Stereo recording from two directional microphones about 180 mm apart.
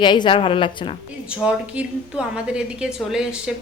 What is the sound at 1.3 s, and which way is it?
A woman's voice, 5° right (ahead or behind).